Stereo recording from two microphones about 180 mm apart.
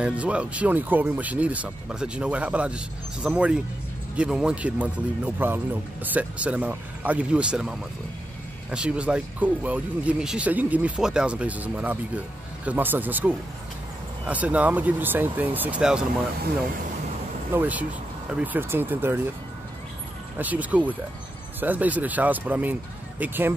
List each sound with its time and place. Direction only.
0.0 s speech: 5° right (ahead or behind)
17.5 s speech: 10° right (ahead or behind)
20.3 s speech: 10° right (ahead or behind)